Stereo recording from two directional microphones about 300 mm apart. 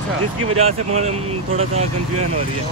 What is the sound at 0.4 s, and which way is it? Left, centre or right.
Speech, centre.